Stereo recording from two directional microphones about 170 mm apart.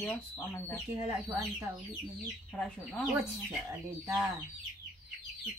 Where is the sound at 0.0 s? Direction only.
10° left (ahead or behind).